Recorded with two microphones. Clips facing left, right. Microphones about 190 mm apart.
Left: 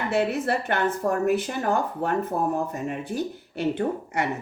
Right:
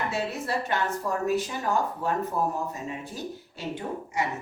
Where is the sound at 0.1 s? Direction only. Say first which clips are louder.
Left 6 dB; 60° left (ahead or behind).